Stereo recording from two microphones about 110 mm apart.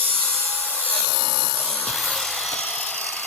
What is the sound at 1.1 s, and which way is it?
Wood, 55° right (ahead or behind).